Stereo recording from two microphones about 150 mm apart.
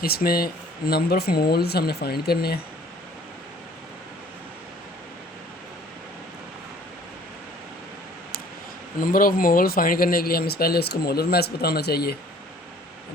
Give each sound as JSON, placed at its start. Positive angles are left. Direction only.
{"t": 0.0, "sound": "speech", "side_deg": 85}
{"t": 9.0, "sound": "speech", "side_deg": 70}